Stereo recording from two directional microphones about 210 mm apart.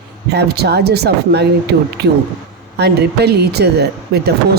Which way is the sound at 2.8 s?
50° right (ahead or behind).